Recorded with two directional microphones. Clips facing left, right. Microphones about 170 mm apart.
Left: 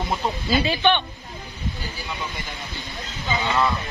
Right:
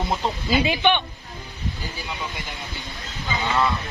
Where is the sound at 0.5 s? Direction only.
15° right (ahead or behind).